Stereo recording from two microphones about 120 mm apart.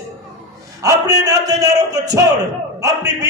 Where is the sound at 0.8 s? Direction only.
30° right (ahead or behind).